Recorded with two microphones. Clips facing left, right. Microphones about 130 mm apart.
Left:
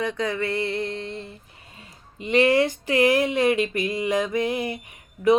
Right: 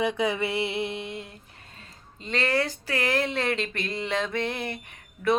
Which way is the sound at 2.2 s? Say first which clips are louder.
Left 8 dB; 15° left (ahead or behind).